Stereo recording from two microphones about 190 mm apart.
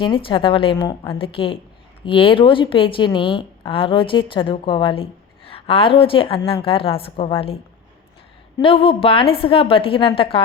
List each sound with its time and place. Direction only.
0.0 s a woman's voice: 25° left (ahead or behind)